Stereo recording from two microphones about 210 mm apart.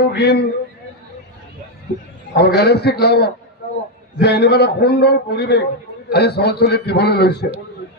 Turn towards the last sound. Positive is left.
turn(degrees=50)  # may be behind; listen again after turning